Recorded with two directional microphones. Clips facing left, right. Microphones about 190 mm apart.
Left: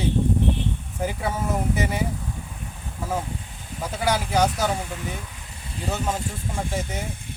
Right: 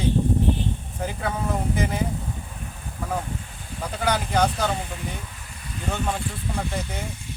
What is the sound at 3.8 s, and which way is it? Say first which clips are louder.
Speech: left 1 dB; 10° left (ahead or behind).